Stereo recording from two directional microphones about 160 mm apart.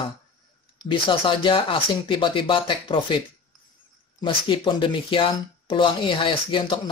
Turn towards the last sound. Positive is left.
turn(degrees=30)  # may be behind; listen again after turning